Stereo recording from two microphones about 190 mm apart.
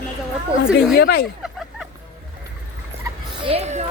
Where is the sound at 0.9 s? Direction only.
55° left (ahead or behind).